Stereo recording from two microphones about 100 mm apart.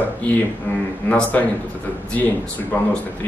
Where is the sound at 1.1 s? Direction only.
15° left (ahead or behind).